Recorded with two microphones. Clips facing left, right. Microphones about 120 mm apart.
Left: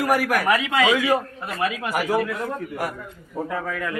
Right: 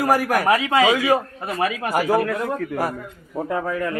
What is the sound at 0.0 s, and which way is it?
A man's voice, 30° right (ahead or behind).